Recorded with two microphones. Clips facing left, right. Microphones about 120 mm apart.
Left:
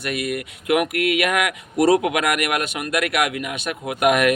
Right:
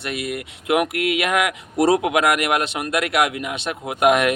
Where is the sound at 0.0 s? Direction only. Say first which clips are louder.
Left 2 dB; 25° right (ahead or behind).